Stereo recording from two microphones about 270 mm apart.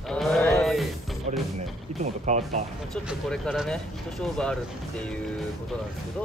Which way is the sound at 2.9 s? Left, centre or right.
Centre.